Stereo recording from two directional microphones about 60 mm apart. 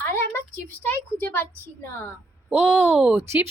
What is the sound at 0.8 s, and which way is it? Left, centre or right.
Speech, left.